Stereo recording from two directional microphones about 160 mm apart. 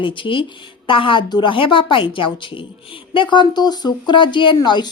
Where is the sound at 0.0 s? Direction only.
30° left (ahead or behind).